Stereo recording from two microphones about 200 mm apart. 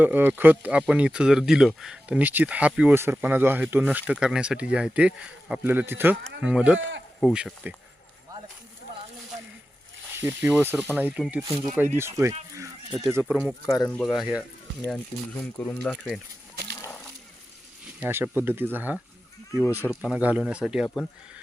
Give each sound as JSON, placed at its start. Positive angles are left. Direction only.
{"t": 0.0, "sound": "speech", "side_deg": -10}
{"t": 6.7, "sound": "speech", "side_deg": -65}
{"t": 7.2, "sound": "speech", "side_deg": 0}
{"t": 10.2, "sound": "speech", "side_deg": -10}
{"t": 13.7, "sound": "speech", "side_deg": 10}
{"t": 14.0, "sound": "speech", "side_deg": 0}
{"t": 15.5, "sound": "speech", "side_deg": 5}
{"t": 16.8, "sound": "a sound", "side_deg": 10}
{"t": 18.0, "sound": "speech", "side_deg": -10}